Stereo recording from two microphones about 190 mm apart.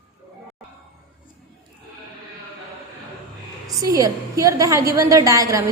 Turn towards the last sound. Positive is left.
turn(degrees=-15)  # may be behind; listen again after turning